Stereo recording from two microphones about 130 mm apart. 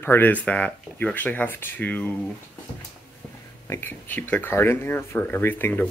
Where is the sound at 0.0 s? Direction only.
15° left (ahead or behind).